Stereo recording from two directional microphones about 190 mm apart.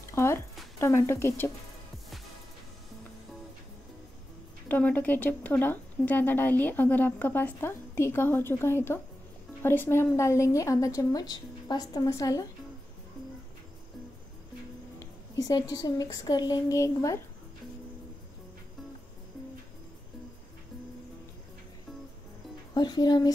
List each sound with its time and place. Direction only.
0.1 s a sound: 15° left (ahead or behind)
0.7 s speech: 15° left (ahead or behind)
4.6 s speech: 10° left (ahead or behind)
15.0 s speech: 20° left (ahead or behind)
22.8 s speech: 20° left (ahead or behind)